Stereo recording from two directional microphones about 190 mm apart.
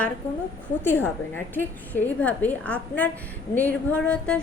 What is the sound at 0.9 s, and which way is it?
A woman's voice, 10° left (ahead or behind).